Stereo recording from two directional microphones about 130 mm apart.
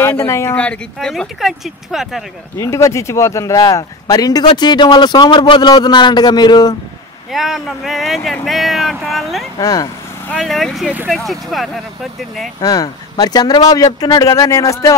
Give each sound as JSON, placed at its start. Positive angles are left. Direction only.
{"t": 0.0, "sound": "speech", "side_deg": 20}
{"t": 0.6, "sound": "speech", "side_deg": 5}
{"t": 2.6, "sound": "speech", "side_deg": 25}
{"t": 7.3, "sound": "speech", "side_deg": 0}
{"t": 9.6, "sound": "speech", "side_deg": 25}
{"t": 10.4, "sound": "speech", "side_deg": 0}
{"t": 12.5, "sound": "speech", "side_deg": 30}